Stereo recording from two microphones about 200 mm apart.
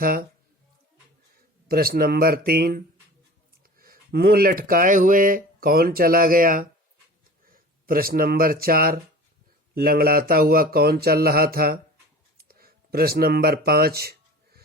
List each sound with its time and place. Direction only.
0.0 s speech: 45° right (ahead or behind)
1.6 s speech: 50° right (ahead or behind)
12.4 s a sound: 50° right (ahead or behind)